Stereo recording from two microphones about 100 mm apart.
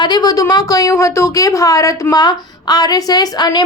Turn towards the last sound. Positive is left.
turn(degrees=45)  # may be behind; listen again after turning